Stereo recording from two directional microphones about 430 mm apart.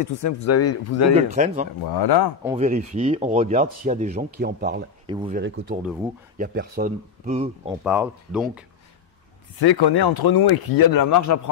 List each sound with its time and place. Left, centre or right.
0.0 s speech: left
1.1 s speech: centre
1.8 s speech: left
2.4 s speech: centre
5.0 s speech: centre
7.8 s speech: centre
9.6 s speech: left